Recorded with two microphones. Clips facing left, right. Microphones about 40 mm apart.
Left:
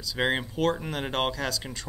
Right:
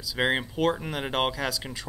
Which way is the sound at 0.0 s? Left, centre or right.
Centre.